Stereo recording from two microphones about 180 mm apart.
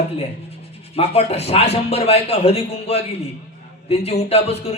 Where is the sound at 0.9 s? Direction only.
35° left (ahead or behind).